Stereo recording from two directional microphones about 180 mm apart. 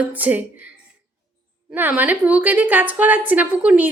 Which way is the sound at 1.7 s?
10° right (ahead or behind).